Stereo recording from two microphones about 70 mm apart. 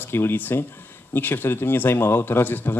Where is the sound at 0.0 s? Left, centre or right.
Left.